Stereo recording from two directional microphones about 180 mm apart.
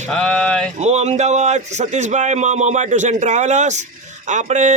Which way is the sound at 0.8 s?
40° right (ahead or behind).